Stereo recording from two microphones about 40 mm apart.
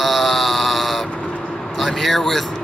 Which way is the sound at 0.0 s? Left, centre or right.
Centre.